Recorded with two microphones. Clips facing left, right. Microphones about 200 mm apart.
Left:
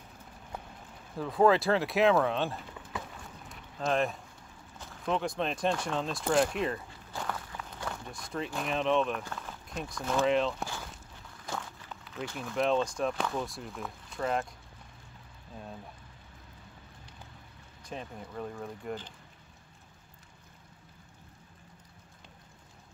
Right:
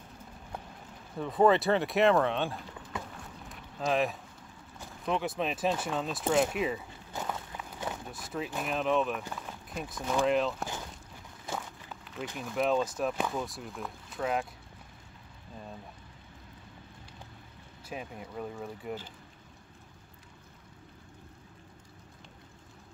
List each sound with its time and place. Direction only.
1.1 s speech: centre (ahead or behind)
3.4 s a sound: centre (ahead or behind)
5.0 s speech: 5° right (ahead or behind)
7.3 s walk: 20° right (ahead or behind)
7.9 s speech: 5° right (ahead or behind)
9.2 s a sound: 10° right (ahead or behind)
9.8 s speech: 5° right (ahead or behind)
12.4 s speech: centre (ahead or behind)
17.8 s speech: 10° right (ahead or behind)